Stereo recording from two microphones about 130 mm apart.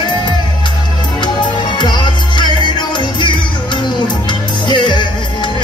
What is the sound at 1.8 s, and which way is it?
Music, 35° left (ahead or behind).